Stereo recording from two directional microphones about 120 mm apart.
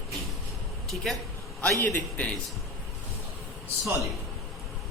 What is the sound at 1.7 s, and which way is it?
Speech, 15° left (ahead or behind).